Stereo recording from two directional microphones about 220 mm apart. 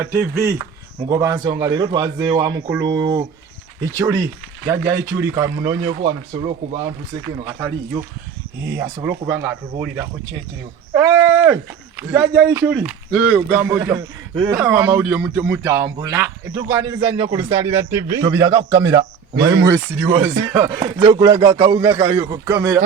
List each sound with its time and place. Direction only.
0.0 s speech: 5° right (ahead or behind); by 6.8 s 25° right (ahead or behind)
7.4 s speech: 10° right (ahead or behind)
10.9 s a sound: 15° right (ahead or behind)
11.9 s speech: 5° right (ahead or behind); by 18.2 s 30° right (ahead or behind)
18.2 s speech: 15° right (ahead or behind)